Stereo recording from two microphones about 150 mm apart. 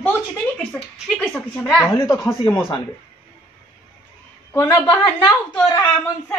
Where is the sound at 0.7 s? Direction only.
5° left (ahead or behind).